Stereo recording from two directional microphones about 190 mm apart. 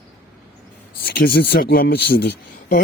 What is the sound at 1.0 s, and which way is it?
Speech, 55° left (ahead or behind).